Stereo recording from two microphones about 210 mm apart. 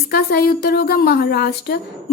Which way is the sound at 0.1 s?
50° left (ahead or behind).